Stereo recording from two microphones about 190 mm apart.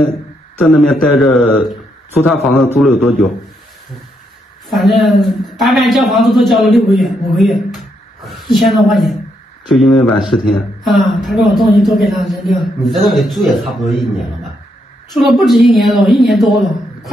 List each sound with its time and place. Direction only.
0.6 s a man's voice: centre (ahead or behind)
4.6 s a man's voice: centre (ahead or behind)
15.1 s a man's voice: centre (ahead or behind)